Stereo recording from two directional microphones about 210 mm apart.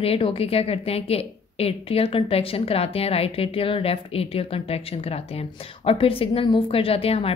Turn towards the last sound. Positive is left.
turn(degrees=30)  # may be behind; listen again after turning